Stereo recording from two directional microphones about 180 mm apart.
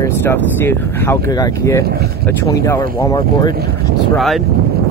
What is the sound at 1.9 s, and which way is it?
Speech, 60° right (ahead or behind).